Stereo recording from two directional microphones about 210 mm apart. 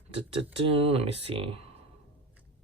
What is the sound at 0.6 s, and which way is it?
Speech, 30° right (ahead or behind).